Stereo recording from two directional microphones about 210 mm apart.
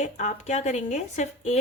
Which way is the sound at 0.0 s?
35° left (ahead or behind).